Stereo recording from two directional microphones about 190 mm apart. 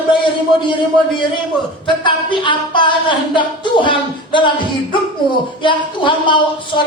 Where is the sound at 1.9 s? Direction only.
25° left (ahead or behind).